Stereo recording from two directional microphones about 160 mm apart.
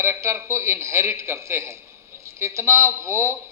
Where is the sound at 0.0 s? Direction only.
15° right (ahead or behind).